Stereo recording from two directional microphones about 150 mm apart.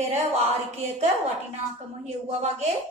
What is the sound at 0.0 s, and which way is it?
A woman's voice, 45° right (ahead or behind).